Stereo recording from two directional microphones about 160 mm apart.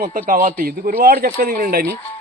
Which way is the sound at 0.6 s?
70° right (ahead or behind).